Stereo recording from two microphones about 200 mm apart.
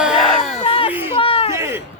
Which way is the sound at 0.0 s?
Centre (ahead or behind).